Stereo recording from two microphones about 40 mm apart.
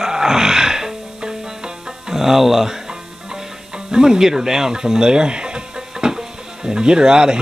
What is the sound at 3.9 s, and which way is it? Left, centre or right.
Speech, centre.